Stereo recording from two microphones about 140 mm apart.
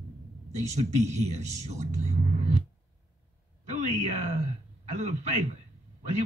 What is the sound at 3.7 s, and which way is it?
Speech, 55° right (ahead or behind).